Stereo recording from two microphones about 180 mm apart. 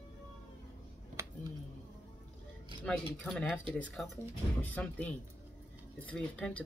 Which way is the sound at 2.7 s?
30° right (ahead or behind).